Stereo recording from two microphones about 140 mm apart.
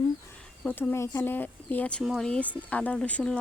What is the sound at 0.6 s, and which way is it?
Speech, 10° left (ahead or behind).